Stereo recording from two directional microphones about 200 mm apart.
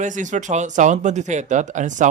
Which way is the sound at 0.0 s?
40° right (ahead or behind).